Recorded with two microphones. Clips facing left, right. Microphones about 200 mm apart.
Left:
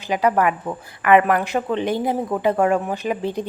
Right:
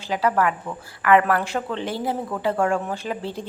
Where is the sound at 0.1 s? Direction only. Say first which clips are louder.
Left 3 dB; 15° left (ahead or behind).